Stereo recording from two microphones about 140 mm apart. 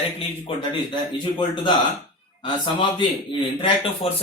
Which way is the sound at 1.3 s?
35° left (ahead or behind).